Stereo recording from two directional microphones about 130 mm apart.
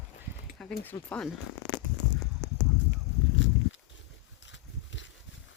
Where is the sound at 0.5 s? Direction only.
5° left (ahead or behind).